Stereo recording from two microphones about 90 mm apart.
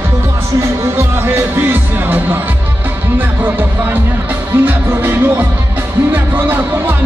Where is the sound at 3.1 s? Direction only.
20° right (ahead or behind).